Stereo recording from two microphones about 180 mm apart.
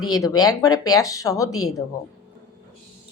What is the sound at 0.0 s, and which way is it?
Speech, 20° left (ahead or behind).